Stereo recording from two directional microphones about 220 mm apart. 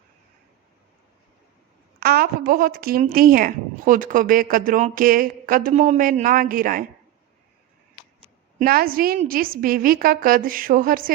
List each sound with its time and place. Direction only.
2.0 s speech: 45° right (ahead or behind)
8.5 s speech: 40° right (ahead or behind)